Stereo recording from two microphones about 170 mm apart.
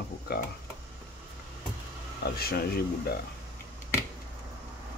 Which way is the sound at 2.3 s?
65° left (ahead or behind).